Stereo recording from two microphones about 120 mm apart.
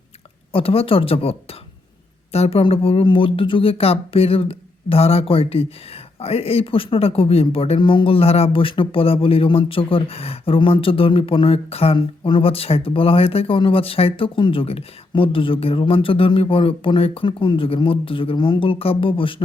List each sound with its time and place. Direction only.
0.5 s speech: 50° left (ahead or behind)
11.9 s speech: 45° left (ahead or behind)